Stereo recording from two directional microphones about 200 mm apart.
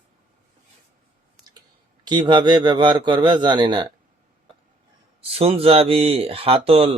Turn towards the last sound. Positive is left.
turn(degrees=-30)  # may be behind; listen again after turning